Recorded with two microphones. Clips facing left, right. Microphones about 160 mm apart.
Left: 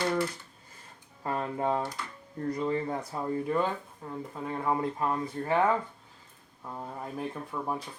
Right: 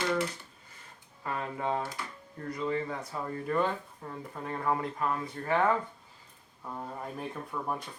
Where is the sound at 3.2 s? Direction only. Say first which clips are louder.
Left 4 dB; 20° left (ahead or behind).